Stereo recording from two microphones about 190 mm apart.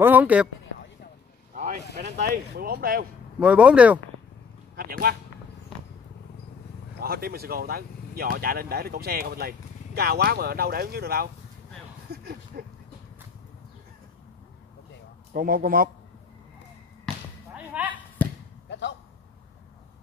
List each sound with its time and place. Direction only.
0.0 s speech: 10° right (ahead or behind)
1.5 s vehicle: 45° right (ahead or behind)
2.2 s speech: 55° right (ahead or behind)
3.3 s speech: 5° right (ahead or behind)
4.7 s speech: 50° right (ahead or behind)
7.0 s speech: 50° right (ahead or behind)
12.1 s a sound: 55° right (ahead or behind)
15.3 s speech: 50° right (ahead or behind)
17.7 s chop: 5° right (ahead or behind)
18.2 s basketball bounce: 10° left (ahead or behind)
18.7 s a sound: 70° left (ahead or behind)